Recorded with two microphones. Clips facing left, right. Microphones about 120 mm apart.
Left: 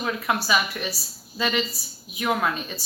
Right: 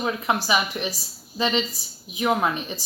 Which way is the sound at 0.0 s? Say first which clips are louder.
Right 2 dB; 20° right (ahead or behind).